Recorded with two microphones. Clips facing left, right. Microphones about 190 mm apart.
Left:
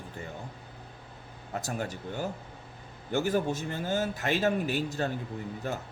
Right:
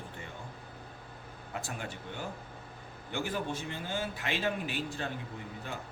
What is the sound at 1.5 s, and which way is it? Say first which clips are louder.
A man's voice: left 6 dB; 40° left (ahead or behind).